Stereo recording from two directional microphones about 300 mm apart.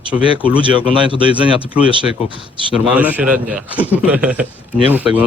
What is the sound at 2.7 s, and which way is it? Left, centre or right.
A man's voice, centre.